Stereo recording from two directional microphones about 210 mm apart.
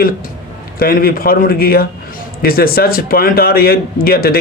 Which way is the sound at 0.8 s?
45° left (ahead or behind).